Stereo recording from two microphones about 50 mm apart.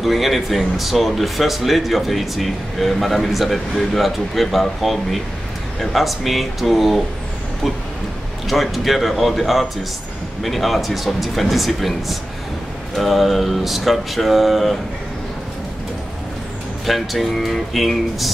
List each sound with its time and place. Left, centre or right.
0.0 s speech: centre
8.5 s speech: centre
16.8 s speech: centre